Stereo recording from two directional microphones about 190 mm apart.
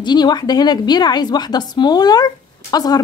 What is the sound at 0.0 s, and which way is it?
A woman's voice, 20° left (ahead or behind).